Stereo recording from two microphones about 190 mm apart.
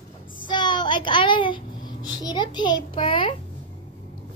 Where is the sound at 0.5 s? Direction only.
25° left (ahead or behind).